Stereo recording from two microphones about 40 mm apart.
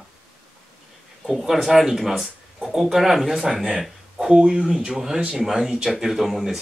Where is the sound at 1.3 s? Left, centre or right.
Centre.